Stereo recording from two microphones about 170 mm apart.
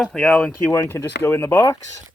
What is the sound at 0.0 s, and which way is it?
Speech, 5° left (ahead or behind).